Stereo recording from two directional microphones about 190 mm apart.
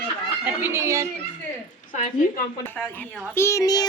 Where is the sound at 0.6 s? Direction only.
10° right (ahead or behind).